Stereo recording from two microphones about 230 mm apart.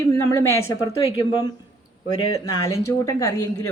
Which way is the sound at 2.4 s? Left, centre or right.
Centre.